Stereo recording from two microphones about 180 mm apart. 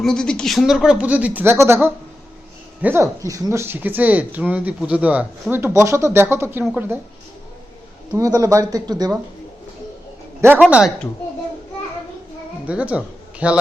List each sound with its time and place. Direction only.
0.0 s speech: 5° left (ahead or behind)
8.1 s speech: 20° right (ahead or behind)
10.4 s speech: 10° right (ahead or behind)
12.6 s speech: 5° right (ahead or behind)